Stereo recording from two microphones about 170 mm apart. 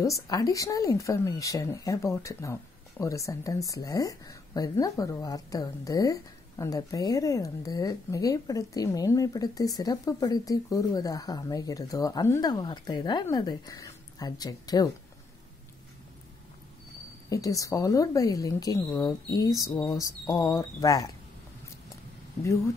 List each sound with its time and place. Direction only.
0.0 s speech: 20° left (ahead or behind)
17.3 s speech: 20° left (ahead or behind)